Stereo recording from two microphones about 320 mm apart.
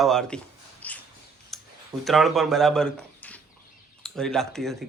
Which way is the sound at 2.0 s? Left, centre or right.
Centre.